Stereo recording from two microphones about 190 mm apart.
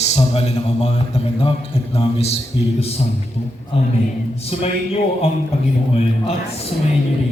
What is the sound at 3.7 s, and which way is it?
Speech, 30° left (ahead or behind).